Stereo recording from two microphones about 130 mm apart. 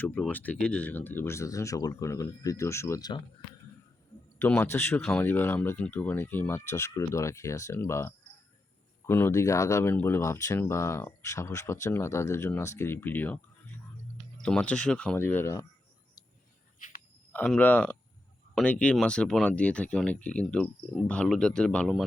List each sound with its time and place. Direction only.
0.0 s speech: 10° left (ahead or behind)
4.4 s speech: 15° left (ahead or behind)
14.4 s speech: 10° left (ahead or behind)
17.3 s speech: 10° left (ahead or behind)